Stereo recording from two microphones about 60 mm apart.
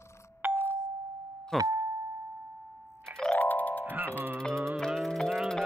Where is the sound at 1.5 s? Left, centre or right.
Centre.